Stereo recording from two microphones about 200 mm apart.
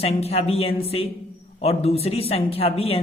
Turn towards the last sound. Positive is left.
turn(degrees=30)  # may be behind; listen again after turning